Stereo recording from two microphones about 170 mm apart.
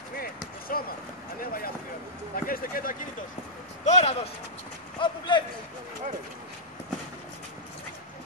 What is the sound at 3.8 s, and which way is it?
Speech, 40° left (ahead or behind).